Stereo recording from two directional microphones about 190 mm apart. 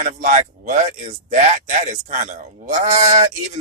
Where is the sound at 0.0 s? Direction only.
40° right (ahead or behind).